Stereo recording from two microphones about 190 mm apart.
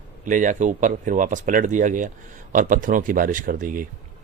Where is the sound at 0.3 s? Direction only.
40° right (ahead or behind).